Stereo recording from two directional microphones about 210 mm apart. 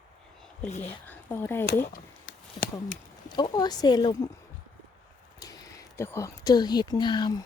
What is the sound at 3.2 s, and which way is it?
Speech, 20° left (ahead or behind).